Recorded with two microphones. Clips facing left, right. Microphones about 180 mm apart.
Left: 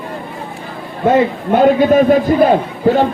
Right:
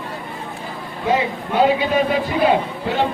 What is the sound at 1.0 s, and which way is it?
A man's voice, 50° left (ahead or behind).